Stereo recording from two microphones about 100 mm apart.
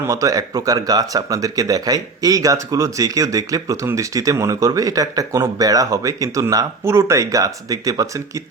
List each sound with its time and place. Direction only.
0.0 s speech: 35° right (ahead or behind)